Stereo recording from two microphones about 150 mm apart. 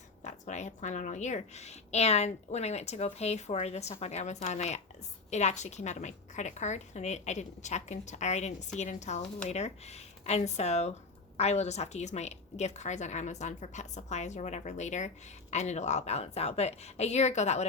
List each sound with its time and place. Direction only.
0.2 s a woman's voice: 50° left (ahead or behind)